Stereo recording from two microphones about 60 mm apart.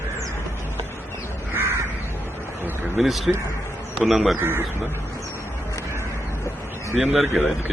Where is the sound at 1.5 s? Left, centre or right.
Right.